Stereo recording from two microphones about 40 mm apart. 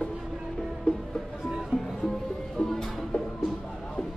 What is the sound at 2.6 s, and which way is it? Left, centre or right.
Music, left.